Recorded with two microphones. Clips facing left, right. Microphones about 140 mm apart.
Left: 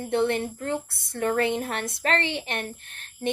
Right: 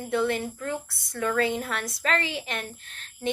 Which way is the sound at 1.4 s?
20° left (ahead or behind).